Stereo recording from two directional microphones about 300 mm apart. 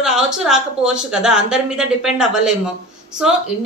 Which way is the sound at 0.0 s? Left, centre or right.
Centre.